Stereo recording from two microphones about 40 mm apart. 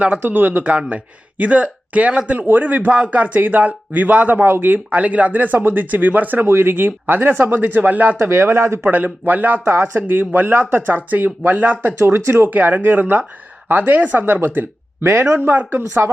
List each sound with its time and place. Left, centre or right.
0.2 s speech: right
0.6 s a man's voice: right
4.3 s speech: right
4.9 s speech: right
6.4 s speech: right
8.2 s speech: right
8.9 s speech: right
9.6 s speech: right
10.1 s speech: right
12.0 s speech: right
12.5 s speech: right
15.1 s speech: right
15.4 s speech: right